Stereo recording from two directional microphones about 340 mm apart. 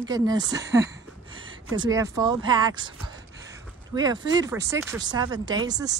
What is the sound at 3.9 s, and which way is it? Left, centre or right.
Speech, centre.